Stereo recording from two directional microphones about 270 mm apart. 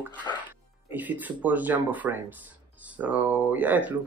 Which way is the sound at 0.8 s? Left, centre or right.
Centre.